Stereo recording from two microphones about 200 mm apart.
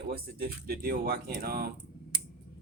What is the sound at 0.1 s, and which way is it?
Speech, 50° right (ahead or behind).